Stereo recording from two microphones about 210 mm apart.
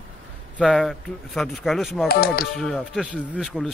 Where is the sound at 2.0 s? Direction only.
45° left (ahead or behind).